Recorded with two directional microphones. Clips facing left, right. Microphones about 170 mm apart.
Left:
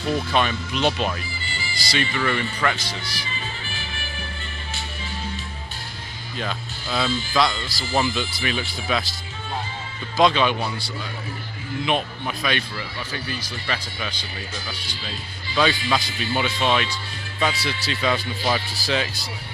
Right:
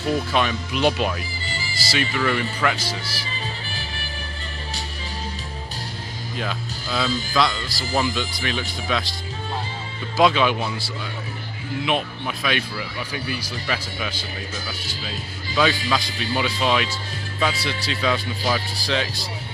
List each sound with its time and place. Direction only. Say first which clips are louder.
0.3 s speech: even; 5° right (ahead or behind)
1.5 s music: right 2 dB; 40° right (ahead or behind)
1.9 s speech: right 1 dB; 5° right (ahead or behind)
3.1 s music: right 1 dB; 35° right (ahead or behind)
6.3 s speech: right 1 dB; centre (ahead or behind)
10.2 s speech: right 1 dB; 5° right (ahead or behind)
16.1 s speech: even; centre (ahead or behind)